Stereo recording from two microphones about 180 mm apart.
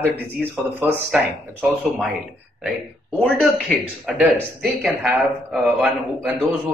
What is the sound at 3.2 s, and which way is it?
A woman's voice, centre (ahead or behind).